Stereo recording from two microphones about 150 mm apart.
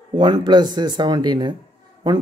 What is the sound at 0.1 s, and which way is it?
Speech, 30° right (ahead or behind).